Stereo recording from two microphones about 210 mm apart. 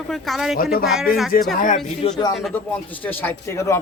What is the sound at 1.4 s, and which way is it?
Speech, 45° left (ahead or behind).